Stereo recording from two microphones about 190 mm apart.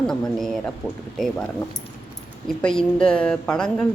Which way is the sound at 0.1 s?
Centre (ahead or behind).